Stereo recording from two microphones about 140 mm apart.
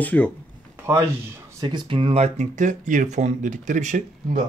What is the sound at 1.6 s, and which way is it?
Speech, 30° right (ahead or behind).